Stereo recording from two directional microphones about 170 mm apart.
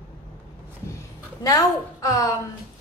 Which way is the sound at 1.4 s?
20° left (ahead or behind).